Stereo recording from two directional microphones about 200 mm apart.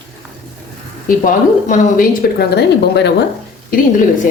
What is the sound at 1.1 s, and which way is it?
A woman's voice, 40° left (ahead or behind).